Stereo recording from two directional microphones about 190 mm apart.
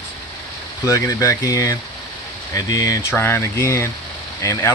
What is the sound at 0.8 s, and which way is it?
Speech, 15° left (ahead or behind).